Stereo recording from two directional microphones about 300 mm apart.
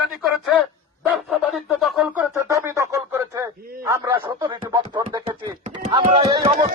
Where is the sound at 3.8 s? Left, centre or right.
Centre.